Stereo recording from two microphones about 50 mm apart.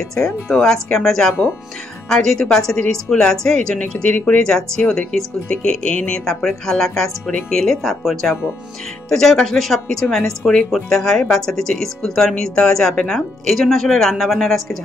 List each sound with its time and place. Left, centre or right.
0.1 s speech: centre
3.8 s speech: left
4.4 s speech: centre
9.1 s speech: centre